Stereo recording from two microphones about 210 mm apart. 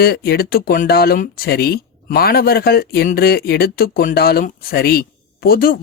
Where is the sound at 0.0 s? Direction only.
45° left (ahead or behind).